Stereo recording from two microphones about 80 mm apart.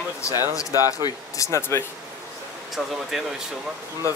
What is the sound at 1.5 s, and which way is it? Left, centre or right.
Speech, left.